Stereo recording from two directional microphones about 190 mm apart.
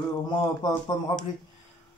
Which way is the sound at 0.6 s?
20° left (ahead or behind).